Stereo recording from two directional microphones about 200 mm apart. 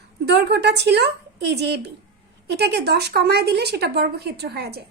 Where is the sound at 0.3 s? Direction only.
55° right (ahead or behind).